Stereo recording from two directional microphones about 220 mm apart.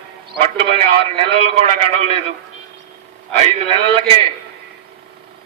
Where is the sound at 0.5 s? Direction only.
25° right (ahead or behind).